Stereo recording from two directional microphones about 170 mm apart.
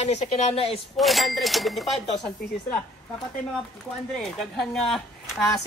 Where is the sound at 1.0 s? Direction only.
Centre (ahead or behind).